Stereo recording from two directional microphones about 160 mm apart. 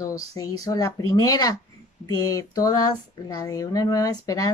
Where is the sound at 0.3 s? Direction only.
20° left (ahead or behind).